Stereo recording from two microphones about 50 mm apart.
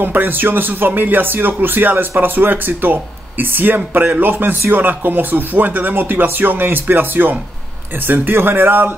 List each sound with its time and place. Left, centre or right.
0.0 s speech: right